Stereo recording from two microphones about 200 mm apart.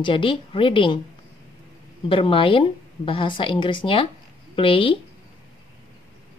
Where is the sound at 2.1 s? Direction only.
25° left (ahead or behind).